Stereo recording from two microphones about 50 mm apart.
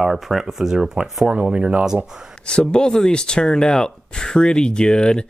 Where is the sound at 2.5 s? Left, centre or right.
Centre.